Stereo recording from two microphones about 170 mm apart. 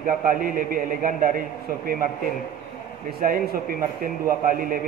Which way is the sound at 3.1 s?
55° right (ahead or behind).